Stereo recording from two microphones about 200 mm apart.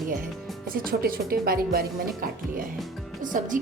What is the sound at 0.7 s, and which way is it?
Speech, 45° right (ahead or behind).